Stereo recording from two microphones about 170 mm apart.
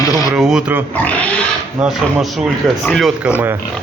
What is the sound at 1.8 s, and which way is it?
Speech, centre (ahead or behind).